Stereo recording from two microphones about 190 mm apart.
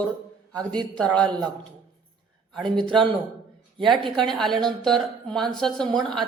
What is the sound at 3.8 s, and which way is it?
Speech, centre (ahead or behind).